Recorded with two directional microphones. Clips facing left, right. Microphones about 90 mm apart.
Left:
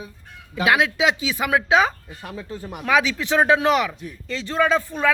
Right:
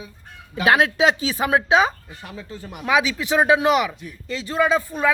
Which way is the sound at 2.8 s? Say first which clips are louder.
Even; 10° right (ahead or behind).